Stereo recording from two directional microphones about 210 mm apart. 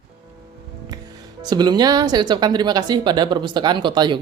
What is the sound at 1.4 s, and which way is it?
Speech, 20° right (ahead or behind).